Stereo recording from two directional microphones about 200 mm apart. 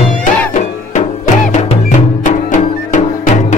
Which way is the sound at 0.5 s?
35° left (ahead or behind).